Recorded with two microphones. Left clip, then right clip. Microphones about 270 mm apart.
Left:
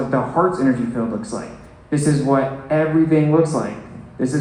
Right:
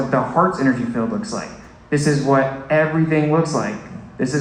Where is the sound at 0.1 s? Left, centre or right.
Right.